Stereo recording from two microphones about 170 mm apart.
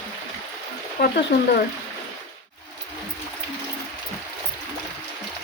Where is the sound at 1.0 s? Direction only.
75° left (ahead or behind).